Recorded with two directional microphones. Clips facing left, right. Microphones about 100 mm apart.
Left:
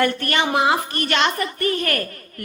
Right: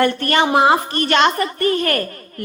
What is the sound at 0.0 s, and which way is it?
A woman's voice, 35° right (ahead or behind).